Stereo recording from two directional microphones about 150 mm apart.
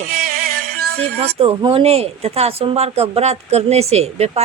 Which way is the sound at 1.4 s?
40° right (ahead or behind).